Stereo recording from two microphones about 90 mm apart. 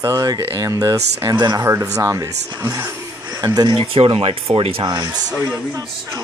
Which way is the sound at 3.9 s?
90° right.